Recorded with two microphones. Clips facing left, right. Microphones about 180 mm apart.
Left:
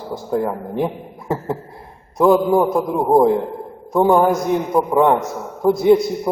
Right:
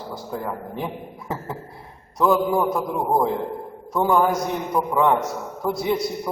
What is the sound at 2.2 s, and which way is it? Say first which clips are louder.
Speech: left 6 dB; 30° left (ahead or behind).